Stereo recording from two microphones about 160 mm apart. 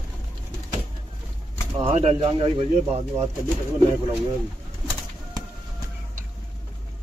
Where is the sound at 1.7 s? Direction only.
35° right (ahead or behind).